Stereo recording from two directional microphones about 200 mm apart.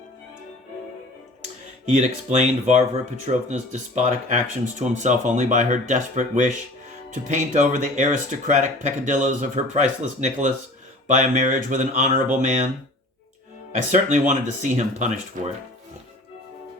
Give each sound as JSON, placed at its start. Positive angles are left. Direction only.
{"t": 1.9, "sound": "speech", "side_deg": -35}
{"t": 13.9, "sound": "speech", "side_deg": -40}